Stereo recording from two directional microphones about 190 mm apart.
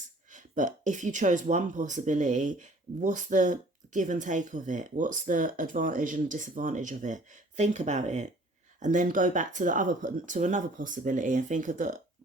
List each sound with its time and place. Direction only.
0.3 s speech: 40° right (ahead or behind)